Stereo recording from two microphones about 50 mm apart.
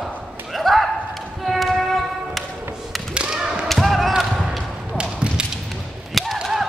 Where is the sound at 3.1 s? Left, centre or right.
Centre.